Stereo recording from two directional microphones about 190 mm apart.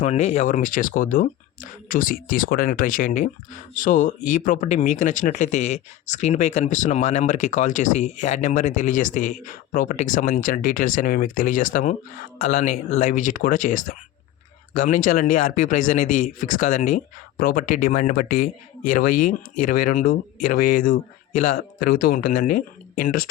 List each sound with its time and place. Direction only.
0.0 s speech: 35° left (ahead or behind)